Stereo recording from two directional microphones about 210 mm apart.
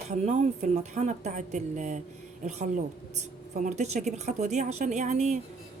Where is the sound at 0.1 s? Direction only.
35° right (ahead or behind).